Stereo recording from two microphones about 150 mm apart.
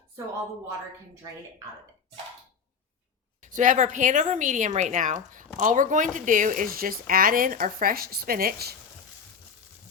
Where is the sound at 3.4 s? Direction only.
60° right (ahead or behind); by 8.8 s 90° right.